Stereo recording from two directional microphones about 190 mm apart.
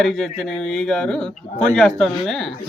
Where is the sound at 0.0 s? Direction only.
Centre (ahead or behind).